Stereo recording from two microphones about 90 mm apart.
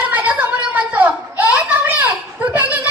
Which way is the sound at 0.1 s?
15° right (ahead or behind).